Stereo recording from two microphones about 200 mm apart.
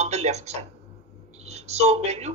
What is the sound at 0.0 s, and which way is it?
Speech, 35° right (ahead or behind).